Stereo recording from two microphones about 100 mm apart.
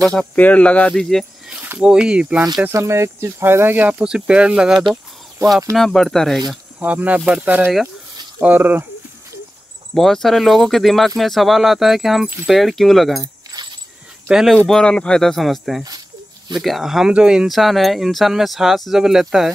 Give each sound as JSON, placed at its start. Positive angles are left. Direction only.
{"t": 0.0, "sound": "speech", "side_deg": 10}
{"t": 1.5, "sound": "a sound", "side_deg": -20}
{"t": 1.8, "sound": "speech", "side_deg": -10}
{"t": 2.7, "sound": "speech", "side_deg": -30}
{"t": 4.0, "sound": "speech", "side_deg": -10}
{"t": 6.8, "sound": "speech", "side_deg": -15}
{"t": 9.9, "sound": "speech", "side_deg": 5}
{"t": 14.7, "sound": "speech", "side_deg": 10}